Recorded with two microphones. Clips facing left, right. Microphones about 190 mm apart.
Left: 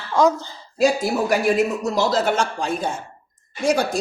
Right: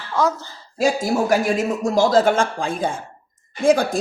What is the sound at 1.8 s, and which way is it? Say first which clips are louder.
Speech: right 4 dB; 50° right (ahead or behind).